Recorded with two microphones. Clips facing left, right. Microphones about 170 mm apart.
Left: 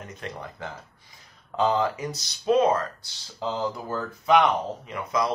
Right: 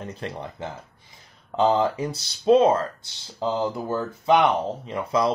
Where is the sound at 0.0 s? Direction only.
30° right (ahead or behind).